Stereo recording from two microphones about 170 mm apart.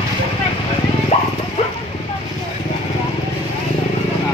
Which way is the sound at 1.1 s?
40° left (ahead or behind).